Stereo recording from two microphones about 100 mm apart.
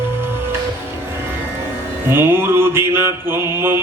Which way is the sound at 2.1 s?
25° right (ahead or behind).